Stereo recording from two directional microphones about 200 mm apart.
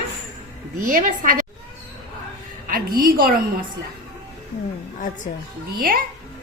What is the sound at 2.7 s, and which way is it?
Speech, 45° right (ahead or behind).